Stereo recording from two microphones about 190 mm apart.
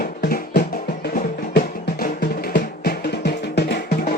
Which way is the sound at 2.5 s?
55° left (ahead or behind).